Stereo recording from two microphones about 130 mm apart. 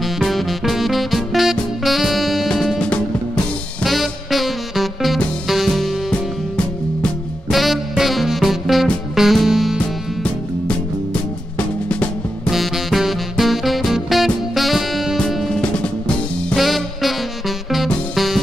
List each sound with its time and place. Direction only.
0.0 s music: centre (ahead or behind)
7.5 s music: centre (ahead or behind)
12.4 s music: centre (ahead or behind)